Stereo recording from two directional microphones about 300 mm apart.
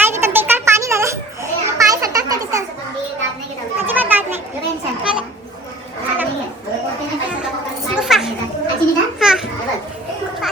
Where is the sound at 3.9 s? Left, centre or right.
Centre.